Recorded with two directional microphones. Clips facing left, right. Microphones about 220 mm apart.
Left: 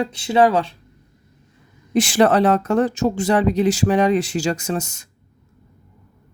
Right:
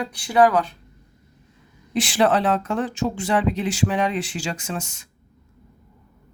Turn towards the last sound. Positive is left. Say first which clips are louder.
# left 6 dB
turn(degrees=40)  # may be behind; listen again after turning